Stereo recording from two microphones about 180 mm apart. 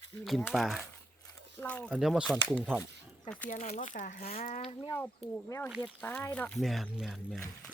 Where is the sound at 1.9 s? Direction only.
5° right (ahead or behind).